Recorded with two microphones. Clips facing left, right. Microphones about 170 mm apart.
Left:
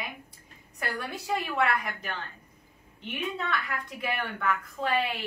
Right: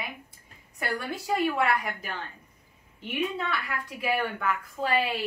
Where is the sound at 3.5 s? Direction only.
5° right (ahead or behind).